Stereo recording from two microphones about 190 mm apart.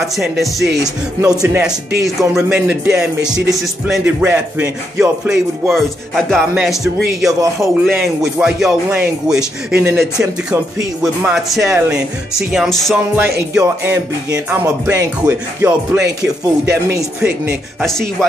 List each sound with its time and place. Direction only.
0.0 s music: centre (ahead or behind)
7.3 s music: 15° right (ahead or behind)
7.8 s music: centre (ahead or behind)
13.6 s music: 15° right (ahead or behind)